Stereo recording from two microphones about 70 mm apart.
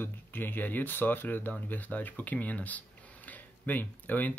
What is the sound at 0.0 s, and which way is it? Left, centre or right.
Speech, left.